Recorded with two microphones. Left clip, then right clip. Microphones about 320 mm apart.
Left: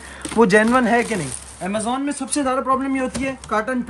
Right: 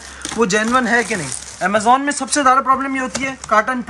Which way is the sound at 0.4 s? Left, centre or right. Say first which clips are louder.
Left 1 dB; centre.